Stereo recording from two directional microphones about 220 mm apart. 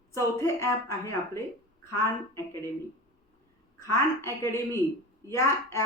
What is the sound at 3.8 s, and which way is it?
A woman's voice, 15° left (ahead or behind).